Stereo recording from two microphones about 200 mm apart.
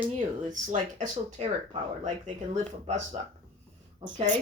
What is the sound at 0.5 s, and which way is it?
Speech, 35° right (ahead or behind).